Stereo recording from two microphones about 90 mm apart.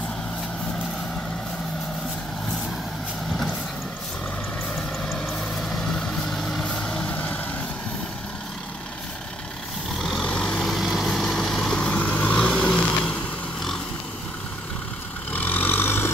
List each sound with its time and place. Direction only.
5.6 s vehicle: 5° left (ahead or behind)
9.9 s vehicle: 5° left (ahead or behind)
15.3 s vehicle: 20° left (ahead or behind)